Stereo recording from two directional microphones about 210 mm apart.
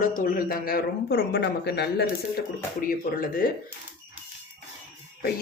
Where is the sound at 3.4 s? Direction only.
45° left (ahead or behind).